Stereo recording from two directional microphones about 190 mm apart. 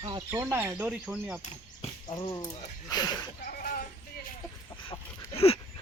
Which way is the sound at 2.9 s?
20° left (ahead or behind).